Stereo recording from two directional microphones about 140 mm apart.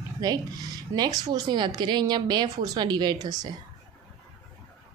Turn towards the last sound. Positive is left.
turn(degrees=-30)  # may be behind; listen again after turning